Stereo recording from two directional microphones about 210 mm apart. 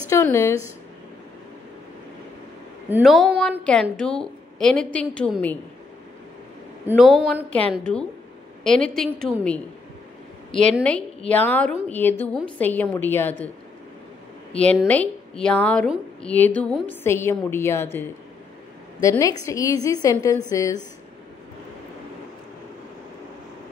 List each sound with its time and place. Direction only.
0.1 s a woman's voice: 15° left (ahead or behind)
2.9 s a woman's voice: centre (ahead or behind)
6.9 s a woman's voice: 5° right (ahead or behind)
10.6 s a woman's voice: 5° left (ahead or behind)
14.5 s a woman's voice: 5° left (ahead or behind)
18.9 s a woman's voice: 15° left (ahead or behind)